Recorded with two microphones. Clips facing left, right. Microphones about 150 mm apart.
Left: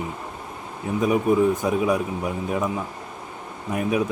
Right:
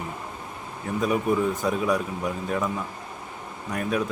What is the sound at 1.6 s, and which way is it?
Speech, 20° left (ahead or behind).